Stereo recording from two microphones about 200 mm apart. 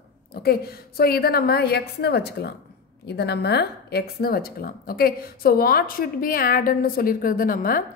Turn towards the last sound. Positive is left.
turn(degrees=45)  # may be behind; listen again after turning